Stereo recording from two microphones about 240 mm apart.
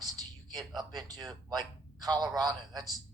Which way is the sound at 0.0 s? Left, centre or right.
Centre.